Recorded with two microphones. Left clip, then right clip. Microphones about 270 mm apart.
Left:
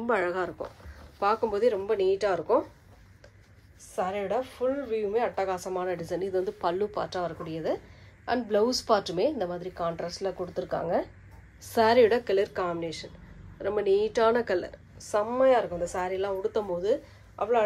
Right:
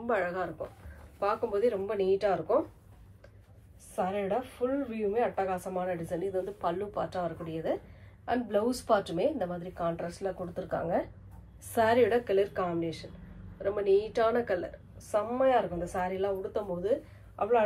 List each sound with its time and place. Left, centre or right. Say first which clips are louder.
0.0 s a woman's voice: left 3 dB; left
3.9 s a woman's voice: left 2 dB; left